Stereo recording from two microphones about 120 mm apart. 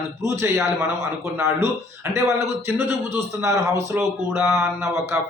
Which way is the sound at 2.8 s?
20° right (ahead or behind).